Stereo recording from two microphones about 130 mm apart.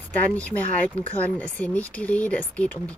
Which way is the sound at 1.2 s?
10° left (ahead or behind).